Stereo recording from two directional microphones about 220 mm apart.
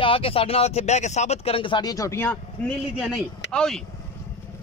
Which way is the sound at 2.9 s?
Centre (ahead or behind).